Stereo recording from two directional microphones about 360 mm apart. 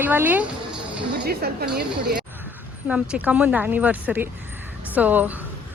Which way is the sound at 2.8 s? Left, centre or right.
Centre.